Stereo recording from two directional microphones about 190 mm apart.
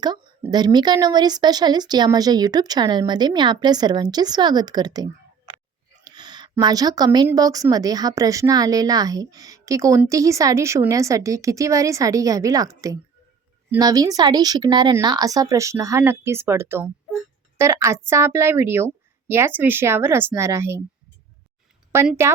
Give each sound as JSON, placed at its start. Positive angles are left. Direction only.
{"t": 0.0, "sound": "a woman's voice", "side_deg": -20}
{"t": 6.1, "sound": "a sound", "side_deg": -20}
{"t": 7.3, "sound": "a woman's voice", "side_deg": -20}
{"t": 21.9, "sound": "a woman's voice", "side_deg": -15}